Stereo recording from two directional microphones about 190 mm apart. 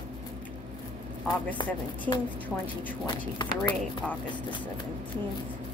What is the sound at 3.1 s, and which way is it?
Speech, 25° left (ahead or behind).